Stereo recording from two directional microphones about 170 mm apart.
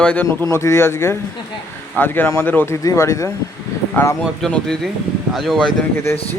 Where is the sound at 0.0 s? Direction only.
10° left (ahead or behind).